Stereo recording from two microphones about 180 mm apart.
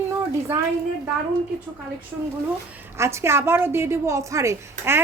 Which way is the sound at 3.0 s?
15° right (ahead or behind).